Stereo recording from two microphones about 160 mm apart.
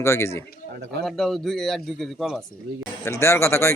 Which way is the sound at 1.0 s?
Centre (ahead or behind).